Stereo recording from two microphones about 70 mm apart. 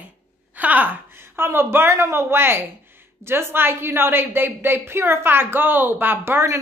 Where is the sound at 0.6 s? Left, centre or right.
Right.